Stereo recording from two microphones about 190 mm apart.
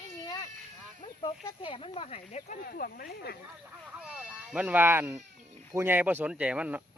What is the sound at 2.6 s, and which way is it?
Speech, 50° left (ahead or behind).